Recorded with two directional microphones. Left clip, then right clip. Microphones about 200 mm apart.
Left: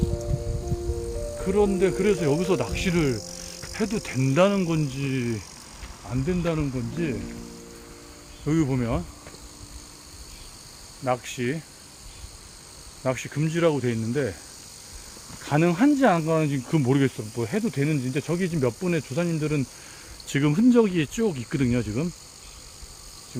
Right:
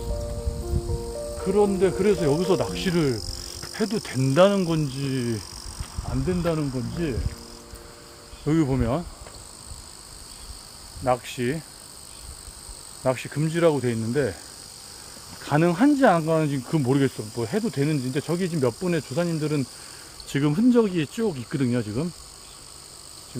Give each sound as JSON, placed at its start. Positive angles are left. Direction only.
{"t": 1.5, "sound": "speech", "side_deg": -10}
{"t": 8.4, "sound": "speech", "side_deg": -20}
{"t": 11.0, "sound": "speech", "side_deg": -15}
{"t": 13.0, "sound": "speech", "side_deg": -10}
{"t": 15.4, "sound": "speech", "side_deg": 0}